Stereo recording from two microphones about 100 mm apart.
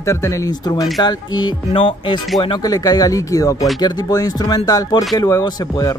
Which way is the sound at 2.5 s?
40° left (ahead or behind).